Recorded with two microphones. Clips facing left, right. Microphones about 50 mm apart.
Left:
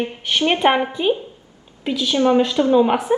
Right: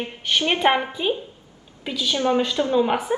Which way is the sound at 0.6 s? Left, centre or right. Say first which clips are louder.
Left 3 dB; centre.